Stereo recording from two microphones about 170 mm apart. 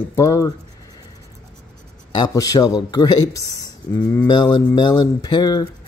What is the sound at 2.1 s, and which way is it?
Speech, 25° left (ahead or behind).